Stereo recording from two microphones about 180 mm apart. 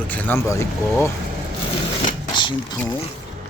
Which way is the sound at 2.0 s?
25° left (ahead or behind).